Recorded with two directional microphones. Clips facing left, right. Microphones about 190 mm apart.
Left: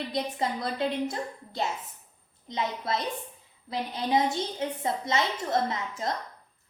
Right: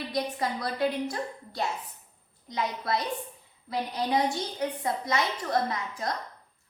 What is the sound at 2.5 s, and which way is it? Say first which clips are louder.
A woman's voice: even; 25° left (ahead or behind).